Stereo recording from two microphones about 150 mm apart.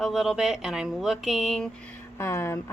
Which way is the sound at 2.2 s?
15° left (ahead or behind).